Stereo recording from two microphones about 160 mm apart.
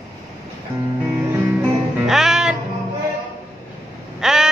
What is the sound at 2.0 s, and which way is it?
Music, centre (ahead or behind).